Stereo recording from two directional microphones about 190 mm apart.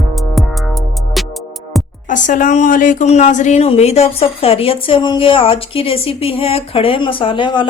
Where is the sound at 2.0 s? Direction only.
40° left (ahead or behind).